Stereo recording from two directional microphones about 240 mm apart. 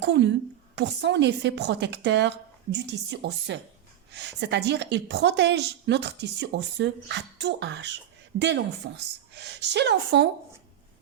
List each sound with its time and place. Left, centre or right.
0.0 s speech: right